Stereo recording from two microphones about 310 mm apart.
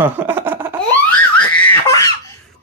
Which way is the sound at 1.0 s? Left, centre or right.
Centre.